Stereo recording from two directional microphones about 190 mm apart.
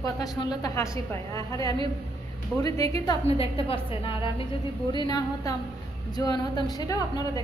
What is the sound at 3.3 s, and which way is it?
A woman's voice, 30° left (ahead or behind).